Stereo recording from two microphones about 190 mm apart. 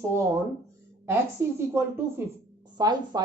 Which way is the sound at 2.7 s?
20° right (ahead or behind).